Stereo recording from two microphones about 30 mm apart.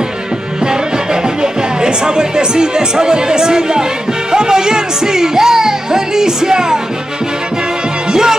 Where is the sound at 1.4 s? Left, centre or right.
Right.